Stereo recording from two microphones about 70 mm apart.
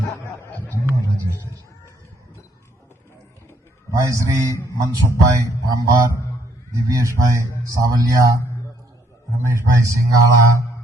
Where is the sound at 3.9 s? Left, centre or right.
Right.